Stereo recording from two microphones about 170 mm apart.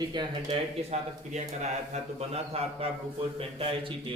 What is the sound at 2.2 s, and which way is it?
A man's voice, 35° right (ahead or behind).